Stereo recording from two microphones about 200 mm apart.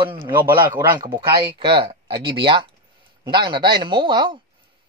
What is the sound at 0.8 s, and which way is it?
A man's voice, 20° right (ahead or behind).